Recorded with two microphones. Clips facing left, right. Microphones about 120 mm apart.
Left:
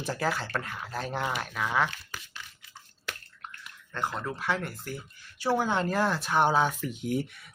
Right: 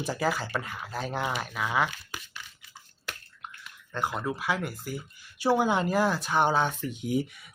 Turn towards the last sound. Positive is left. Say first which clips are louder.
# right 1 dB
turn(degrees=0)  # may be behind; listen again after turning